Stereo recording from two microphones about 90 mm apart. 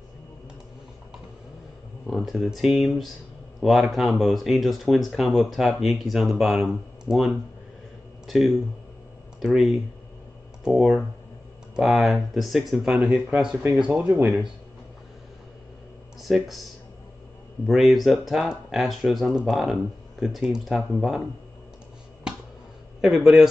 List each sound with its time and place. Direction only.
2.0 s speech: centre (ahead or behind)
14.0 s speech: 15° right (ahead or behind)
16.2 s speech: centre (ahead or behind)
17.6 s speech: centre (ahead or behind)
22.9 s speech: 5° right (ahead or behind)